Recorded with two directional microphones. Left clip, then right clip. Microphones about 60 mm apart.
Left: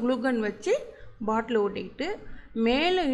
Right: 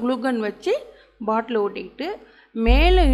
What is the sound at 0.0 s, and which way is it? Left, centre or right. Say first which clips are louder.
A woman's voice: right 3 dB; right.